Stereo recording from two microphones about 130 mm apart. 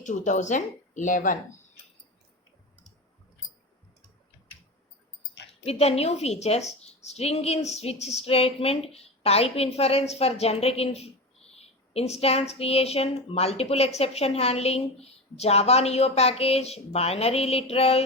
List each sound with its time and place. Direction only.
0.0 s a woman's voice: 70° left (ahead or behind); by 1.4 s 85° left
5.6 s a woman's voice: 50° left (ahead or behind)